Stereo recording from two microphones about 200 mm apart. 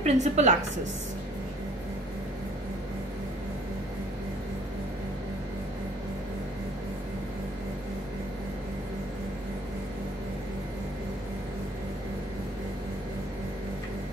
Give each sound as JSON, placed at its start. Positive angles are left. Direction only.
{"t": 0.0, "sound": "a woman's voice", "side_deg": -35}